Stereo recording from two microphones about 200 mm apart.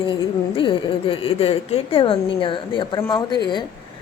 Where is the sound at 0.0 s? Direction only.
25° left (ahead or behind).